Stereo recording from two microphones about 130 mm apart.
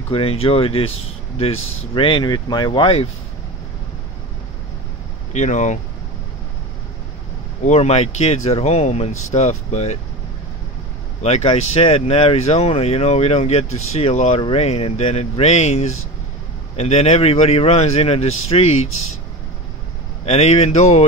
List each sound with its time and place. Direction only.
0.1 s speech: 45° left (ahead or behind)
5.3 s speech: 65° left (ahead or behind)
7.6 s speech: 55° left (ahead or behind)
11.2 s speech: 55° left (ahead or behind)
20.2 s speech: 55° left (ahead or behind)